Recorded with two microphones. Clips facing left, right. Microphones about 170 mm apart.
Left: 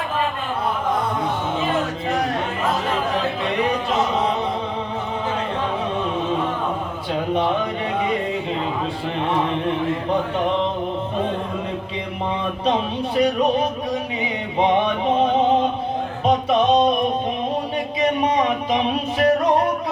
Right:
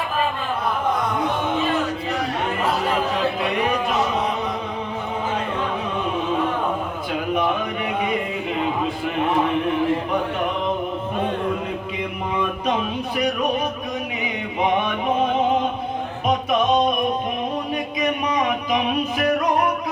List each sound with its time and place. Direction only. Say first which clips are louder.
7.1 s a sound: left 2 dB; 30° left (ahead or behind)
13.1 s speech: left 4 dB; 30° left (ahead or behind)
14.6 s music: left 3 dB; 30° left (ahead or behind)
18.0 s music: left 4 dB; 30° left (ahead or behind)